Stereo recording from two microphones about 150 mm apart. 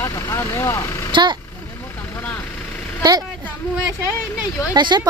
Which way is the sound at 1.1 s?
30° right (ahead or behind).